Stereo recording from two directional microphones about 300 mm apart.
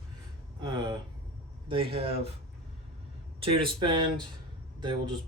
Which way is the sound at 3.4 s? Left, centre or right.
Centre.